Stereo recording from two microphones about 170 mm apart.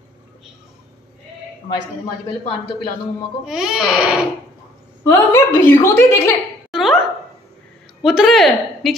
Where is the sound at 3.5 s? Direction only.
5° right (ahead or behind).